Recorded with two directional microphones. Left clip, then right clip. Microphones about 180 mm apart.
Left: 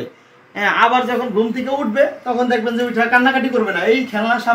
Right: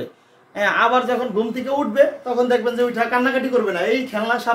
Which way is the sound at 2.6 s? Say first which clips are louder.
Left 2 dB; 35° right (ahead or behind).